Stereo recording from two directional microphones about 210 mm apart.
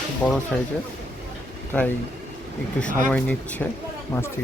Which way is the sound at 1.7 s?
10° left (ahead or behind).